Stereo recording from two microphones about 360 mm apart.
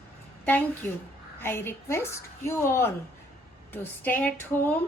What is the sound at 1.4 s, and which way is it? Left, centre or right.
A woman's voice, centre.